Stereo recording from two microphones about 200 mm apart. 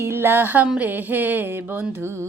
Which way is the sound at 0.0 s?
10° right (ahead or behind).